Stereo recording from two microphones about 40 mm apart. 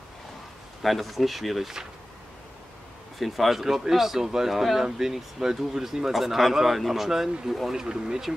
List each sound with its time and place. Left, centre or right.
0.8 s speech: centre
3.2 s speech: centre
7.8 s speech: centre